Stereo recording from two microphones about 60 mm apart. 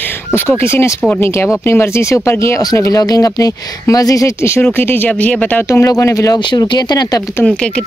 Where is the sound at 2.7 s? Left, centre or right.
Left.